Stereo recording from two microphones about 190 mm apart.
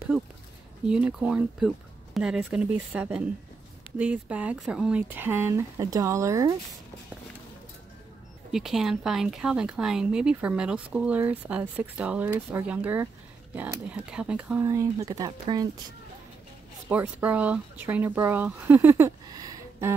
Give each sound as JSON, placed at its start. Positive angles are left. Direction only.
{"t": 0.1, "sound": "speech", "side_deg": -5}
{"t": 8.5, "sound": "speech", "side_deg": 0}
{"t": 14.6, "sound": "speech", "side_deg": -15}
{"t": 16.9, "sound": "speech", "side_deg": -10}